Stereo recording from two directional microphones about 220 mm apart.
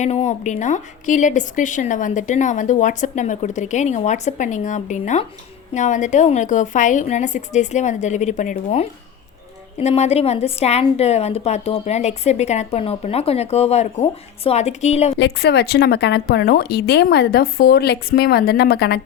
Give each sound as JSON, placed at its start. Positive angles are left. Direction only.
{"t": 0.0, "sound": "a woman's voice", "side_deg": 30}
{"t": 15.2, "sound": "a woman's voice", "side_deg": 50}